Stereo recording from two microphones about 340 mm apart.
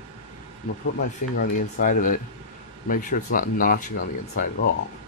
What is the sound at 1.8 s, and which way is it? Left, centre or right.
Speech, left.